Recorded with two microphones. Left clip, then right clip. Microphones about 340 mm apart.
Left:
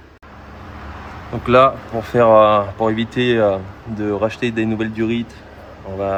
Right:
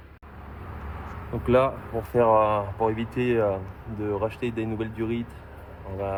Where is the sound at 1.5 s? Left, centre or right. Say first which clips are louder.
Left 10 dB; left.